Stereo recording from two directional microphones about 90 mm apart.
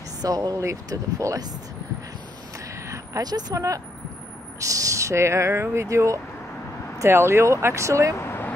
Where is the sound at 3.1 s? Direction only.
45° right (ahead or behind).